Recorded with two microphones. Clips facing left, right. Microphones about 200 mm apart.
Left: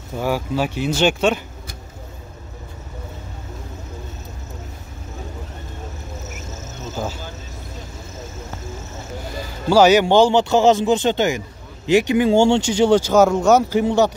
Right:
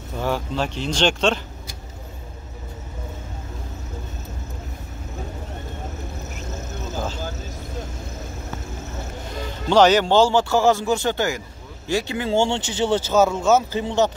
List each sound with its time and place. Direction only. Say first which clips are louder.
0.2 s speech: left 3 dB; 10° left (ahead or behind)
9.7 s speech: left 3 dB; 10° left (ahead or behind)